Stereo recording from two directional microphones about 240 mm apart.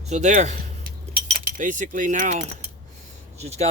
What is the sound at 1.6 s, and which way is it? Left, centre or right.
Speech, right.